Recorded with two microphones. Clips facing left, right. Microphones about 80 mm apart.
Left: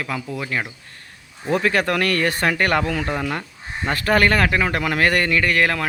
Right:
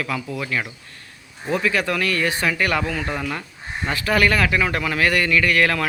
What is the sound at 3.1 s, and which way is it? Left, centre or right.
Speech, left.